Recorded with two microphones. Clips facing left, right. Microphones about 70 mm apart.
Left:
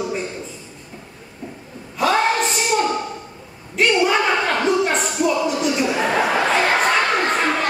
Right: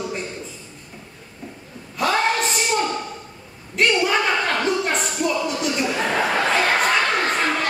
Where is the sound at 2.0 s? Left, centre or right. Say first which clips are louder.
Left 2 dB; centre.